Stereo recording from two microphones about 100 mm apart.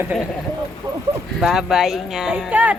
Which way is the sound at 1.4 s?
5° right (ahead or behind).